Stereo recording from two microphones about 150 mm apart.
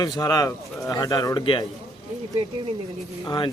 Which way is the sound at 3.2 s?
30° left (ahead or behind).